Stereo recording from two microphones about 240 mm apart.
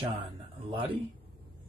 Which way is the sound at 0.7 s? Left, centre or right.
Right.